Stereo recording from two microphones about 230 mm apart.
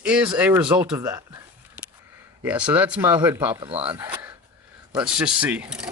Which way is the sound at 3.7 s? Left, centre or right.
Right.